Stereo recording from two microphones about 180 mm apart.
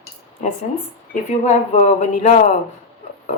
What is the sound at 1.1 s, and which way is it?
Speech, 40° left (ahead or behind).